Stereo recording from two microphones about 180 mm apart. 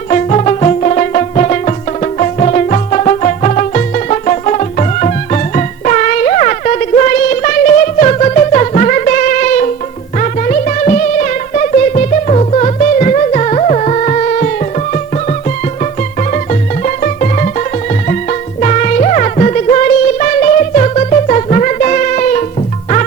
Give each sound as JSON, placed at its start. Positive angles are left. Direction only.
{"t": 0.1, "sound": "music", "side_deg": 40}